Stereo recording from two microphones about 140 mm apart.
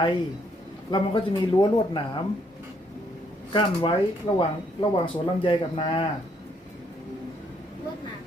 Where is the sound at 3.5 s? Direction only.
40° left (ahead or behind).